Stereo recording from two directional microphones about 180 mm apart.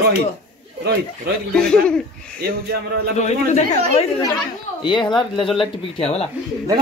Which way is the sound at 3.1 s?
40° left (ahead or behind).